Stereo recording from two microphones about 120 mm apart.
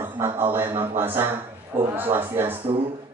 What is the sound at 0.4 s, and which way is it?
A man's voice, 15° right (ahead or behind).